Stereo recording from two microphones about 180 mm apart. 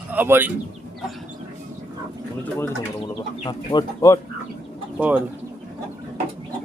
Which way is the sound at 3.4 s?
20° left (ahead or behind).